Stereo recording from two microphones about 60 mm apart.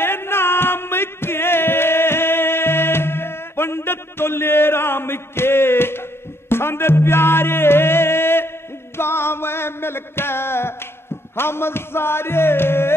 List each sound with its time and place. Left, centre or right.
0.0 s music: left